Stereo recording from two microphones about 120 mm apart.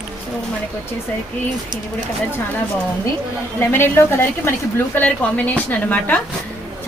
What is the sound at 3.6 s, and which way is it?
A woman's voice, 20° left (ahead or behind).